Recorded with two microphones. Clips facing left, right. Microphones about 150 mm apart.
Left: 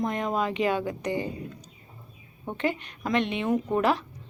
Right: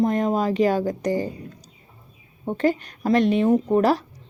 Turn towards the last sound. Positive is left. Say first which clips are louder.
# right 6 dB
turn(degrees=-40)  # may be behind; listen again after turning